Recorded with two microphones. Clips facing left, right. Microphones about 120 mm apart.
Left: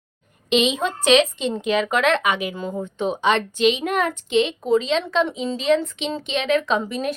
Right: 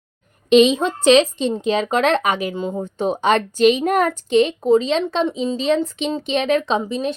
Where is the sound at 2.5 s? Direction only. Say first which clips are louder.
Right 4 dB; 20° right (ahead or behind).